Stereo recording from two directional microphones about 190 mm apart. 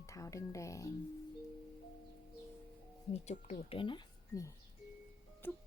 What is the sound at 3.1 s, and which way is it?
Speech, 35° left (ahead or behind).